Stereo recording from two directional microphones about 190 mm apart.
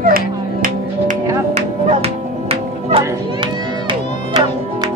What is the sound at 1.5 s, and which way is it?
Music, 30° right (ahead or behind).